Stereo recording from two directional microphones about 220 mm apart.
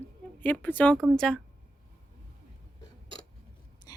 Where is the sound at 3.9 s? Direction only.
15° left (ahead or behind).